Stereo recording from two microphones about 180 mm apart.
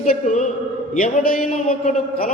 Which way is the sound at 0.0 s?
45° left (ahead or behind).